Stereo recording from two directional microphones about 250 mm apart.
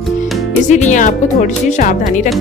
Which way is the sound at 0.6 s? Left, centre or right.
Left.